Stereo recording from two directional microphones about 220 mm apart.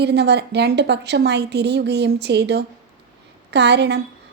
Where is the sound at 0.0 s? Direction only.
50° right (ahead or behind).